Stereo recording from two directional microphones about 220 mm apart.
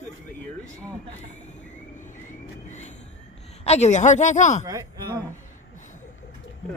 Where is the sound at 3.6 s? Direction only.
30° left (ahead or behind).